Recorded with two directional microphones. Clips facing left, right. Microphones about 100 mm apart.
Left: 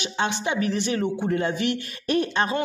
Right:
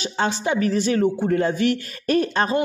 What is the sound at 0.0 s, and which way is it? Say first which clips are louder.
A man's voice: right 3 dB; 35° right (ahead or behind).